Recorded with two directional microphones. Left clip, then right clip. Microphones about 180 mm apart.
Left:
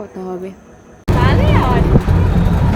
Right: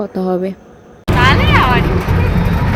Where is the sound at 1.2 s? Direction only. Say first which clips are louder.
Right 5 dB; 20° left (ahead or behind).